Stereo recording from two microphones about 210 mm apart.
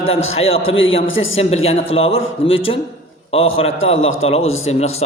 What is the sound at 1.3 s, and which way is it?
A man's voice, 30° left (ahead or behind).